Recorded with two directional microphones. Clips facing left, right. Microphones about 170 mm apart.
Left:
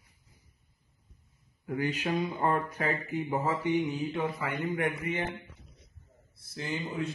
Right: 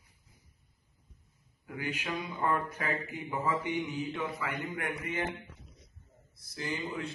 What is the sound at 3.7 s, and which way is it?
Mantra, 15° left (ahead or behind).